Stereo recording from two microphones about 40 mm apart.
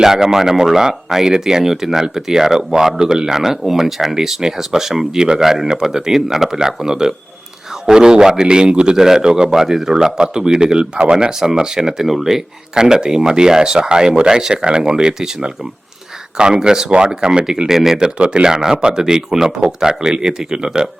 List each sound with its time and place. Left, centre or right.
0.0 s a man's voice: centre
18.0 s a man's voice: right
18.4 s speech: centre